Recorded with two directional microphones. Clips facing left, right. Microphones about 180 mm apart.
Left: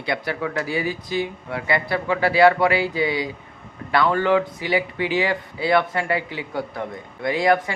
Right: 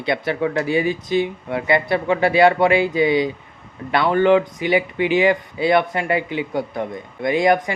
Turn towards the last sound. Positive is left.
turn(degrees=-20)  # may be behind; listen again after turning